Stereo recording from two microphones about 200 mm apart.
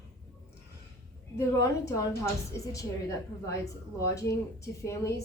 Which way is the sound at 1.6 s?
15° left (ahead or behind).